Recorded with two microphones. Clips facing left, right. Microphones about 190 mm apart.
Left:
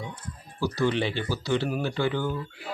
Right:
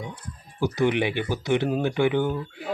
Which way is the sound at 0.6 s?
20° right (ahead or behind).